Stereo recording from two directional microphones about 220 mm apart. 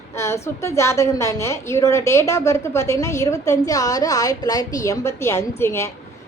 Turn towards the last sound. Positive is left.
turn(degrees=10)  # may be behind; listen again after turning